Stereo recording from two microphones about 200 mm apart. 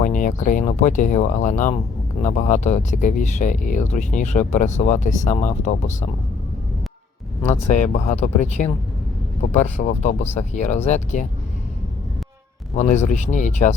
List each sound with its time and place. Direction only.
0.0 s speech: 40° left (ahead or behind)
7.7 s speech: 40° left (ahead or behind)
12.7 s speech: 35° left (ahead or behind)